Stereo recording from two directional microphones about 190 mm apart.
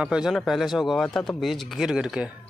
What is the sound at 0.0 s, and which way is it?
Speech, 5° right (ahead or behind).